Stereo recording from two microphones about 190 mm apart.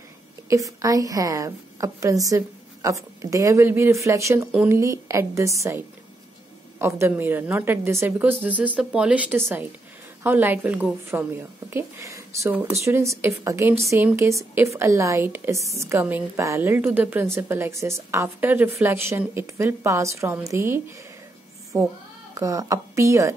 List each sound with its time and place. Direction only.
0.5 s a woman's voice: 15° right (ahead or behind)